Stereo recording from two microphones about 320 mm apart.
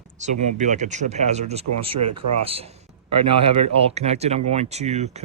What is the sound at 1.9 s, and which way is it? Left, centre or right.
Speech, right.